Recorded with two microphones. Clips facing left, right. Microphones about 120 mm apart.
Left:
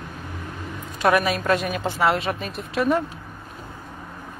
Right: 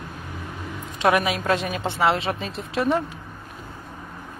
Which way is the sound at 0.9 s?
25° right (ahead or behind).